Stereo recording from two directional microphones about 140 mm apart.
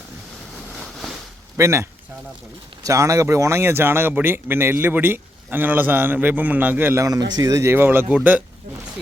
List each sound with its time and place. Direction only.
1.5 s speech: 20° right (ahead or behind)